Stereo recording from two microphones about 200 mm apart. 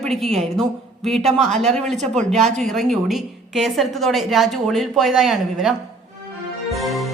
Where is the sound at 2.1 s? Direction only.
35° right (ahead or behind).